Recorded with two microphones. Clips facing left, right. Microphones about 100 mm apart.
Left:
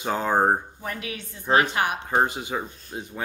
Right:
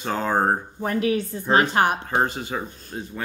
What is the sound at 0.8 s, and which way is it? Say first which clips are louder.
A woman's voice: right 11 dB; 40° right (ahead or behind).